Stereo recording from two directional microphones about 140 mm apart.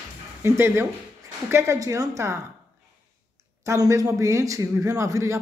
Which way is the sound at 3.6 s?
25° right (ahead or behind).